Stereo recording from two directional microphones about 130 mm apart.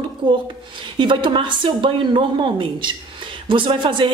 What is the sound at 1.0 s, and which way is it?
A man's voice, 40° right (ahead or behind).